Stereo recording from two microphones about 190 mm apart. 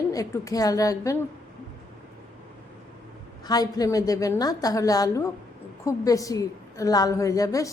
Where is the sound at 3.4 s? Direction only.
20° left (ahead or behind).